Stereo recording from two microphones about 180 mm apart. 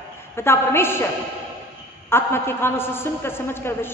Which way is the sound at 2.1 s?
15° left (ahead or behind).